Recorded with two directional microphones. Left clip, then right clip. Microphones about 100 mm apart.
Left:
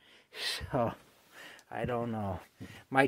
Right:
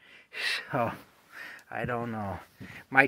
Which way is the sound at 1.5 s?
Centre (ahead or behind).